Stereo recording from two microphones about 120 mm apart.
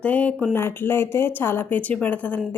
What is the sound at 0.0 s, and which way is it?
A woman's voice, 10° left (ahead or behind).